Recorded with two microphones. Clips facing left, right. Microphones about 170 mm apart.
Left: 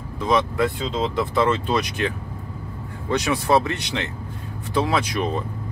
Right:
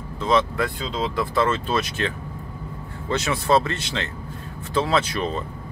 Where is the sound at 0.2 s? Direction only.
15° left (ahead or behind).